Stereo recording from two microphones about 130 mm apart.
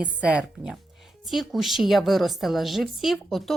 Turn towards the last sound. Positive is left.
turn(degrees=0)  # may be behind; listen again after turning